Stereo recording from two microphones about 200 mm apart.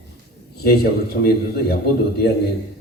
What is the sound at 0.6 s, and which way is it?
Speech, 50° left (ahead or behind).